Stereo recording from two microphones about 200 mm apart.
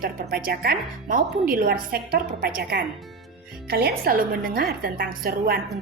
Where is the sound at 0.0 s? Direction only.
50° right (ahead or behind).